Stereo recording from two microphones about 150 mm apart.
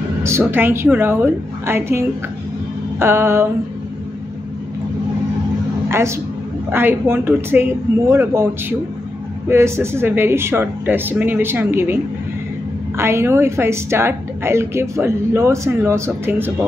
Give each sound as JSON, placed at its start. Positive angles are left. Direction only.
{"t": 0.2, "sound": "a woman's voice", "side_deg": -15}
{"t": 5.9, "sound": "a woman's voice", "side_deg": -15}